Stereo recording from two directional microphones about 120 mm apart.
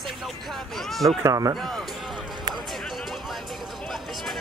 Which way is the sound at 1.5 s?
Centre (ahead or behind).